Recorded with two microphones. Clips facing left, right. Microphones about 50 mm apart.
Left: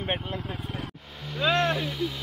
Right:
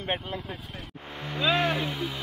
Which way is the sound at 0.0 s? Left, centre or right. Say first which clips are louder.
Left 1 dB; centre.